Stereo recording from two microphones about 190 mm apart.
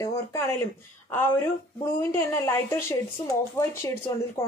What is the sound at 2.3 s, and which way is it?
Speech, 15° left (ahead or behind).